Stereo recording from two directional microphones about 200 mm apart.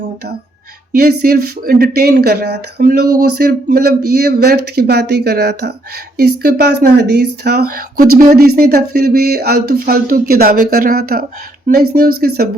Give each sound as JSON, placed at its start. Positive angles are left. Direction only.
{"t": 1.2, "sound": "speech", "side_deg": -50}